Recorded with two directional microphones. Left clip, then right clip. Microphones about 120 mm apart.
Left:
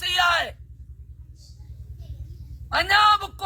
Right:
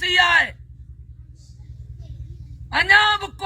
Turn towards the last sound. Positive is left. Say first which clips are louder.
# right 2 dB
turn(degrees=55)  # may be behind; listen again after turning